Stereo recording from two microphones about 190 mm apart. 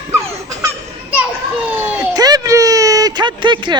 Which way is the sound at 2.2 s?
20° right (ahead or behind).